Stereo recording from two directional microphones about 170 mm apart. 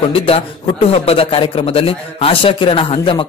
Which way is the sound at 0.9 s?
35° left (ahead or behind).